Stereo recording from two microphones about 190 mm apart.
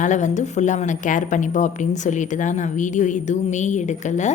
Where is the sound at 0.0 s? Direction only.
40° left (ahead or behind).